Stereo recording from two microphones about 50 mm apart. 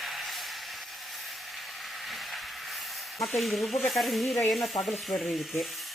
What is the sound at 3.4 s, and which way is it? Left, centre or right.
Stir, centre.